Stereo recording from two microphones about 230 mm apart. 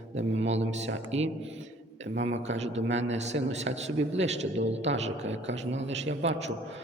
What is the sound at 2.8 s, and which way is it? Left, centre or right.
Speech, right.